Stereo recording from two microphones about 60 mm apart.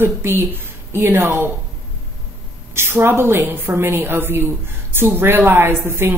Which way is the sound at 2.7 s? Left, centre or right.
Right.